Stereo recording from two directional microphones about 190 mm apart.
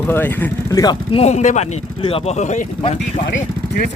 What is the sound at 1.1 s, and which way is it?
Speech, 35° left (ahead or behind).